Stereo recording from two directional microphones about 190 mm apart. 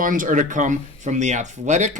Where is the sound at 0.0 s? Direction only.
45° right (ahead or behind).